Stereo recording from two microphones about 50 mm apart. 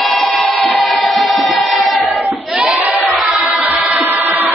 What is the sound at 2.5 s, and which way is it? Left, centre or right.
Crowd, centre.